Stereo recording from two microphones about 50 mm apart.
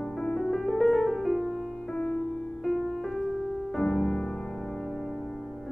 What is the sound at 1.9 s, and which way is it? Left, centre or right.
Music, centre.